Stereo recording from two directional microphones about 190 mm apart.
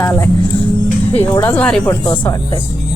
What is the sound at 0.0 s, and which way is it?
Speech, 15° left (ahead or behind).